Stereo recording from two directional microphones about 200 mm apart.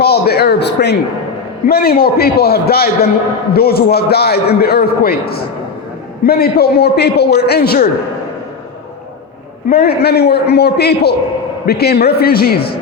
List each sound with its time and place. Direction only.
0.0 s a sound: 50° left (ahead or behind)
1.6 s a man's voice: 50° left (ahead or behind)
9.6 s a man's voice: 50° left (ahead or behind)